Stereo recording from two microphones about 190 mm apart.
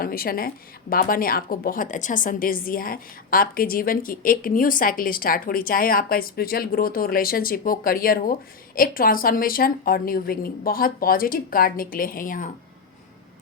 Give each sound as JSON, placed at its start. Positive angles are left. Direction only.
{"t": 0.0, "sound": "a woman's voice", "side_deg": 50}